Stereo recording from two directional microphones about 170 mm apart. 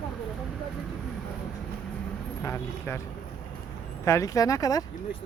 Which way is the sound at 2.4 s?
15° left (ahead or behind).